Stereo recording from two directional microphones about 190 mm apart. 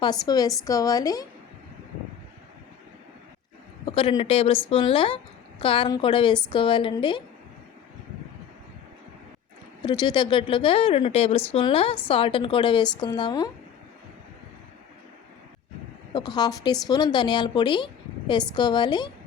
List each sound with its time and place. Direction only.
0.0 s speech: 20° left (ahead or behind)
3.9 s speech: 30° left (ahead or behind)
9.8 s speech: 25° left (ahead or behind)
16.1 s speech: 20° left (ahead or behind)